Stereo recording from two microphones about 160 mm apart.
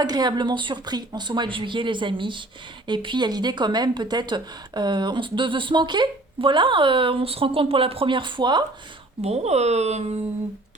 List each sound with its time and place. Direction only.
0.0 s speech: 25° right (ahead or behind)
9.2 s speech: 40° right (ahead or behind)